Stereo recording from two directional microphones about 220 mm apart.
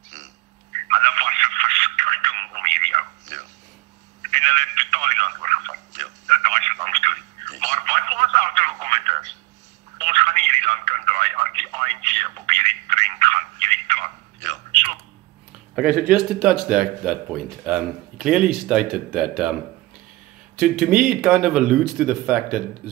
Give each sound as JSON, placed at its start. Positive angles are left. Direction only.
{"t": 0.8, "sound": "telephone", "side_deg": -35}
{"t": 15.7, "sound": "speech", "side_deg": -5}
{"t": 20.5, "sound": "speech", "side_deg": -5}